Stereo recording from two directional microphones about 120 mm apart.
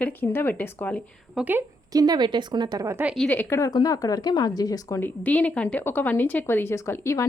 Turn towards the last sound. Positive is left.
turn(degrees=25)  # may be behind; listen again after turning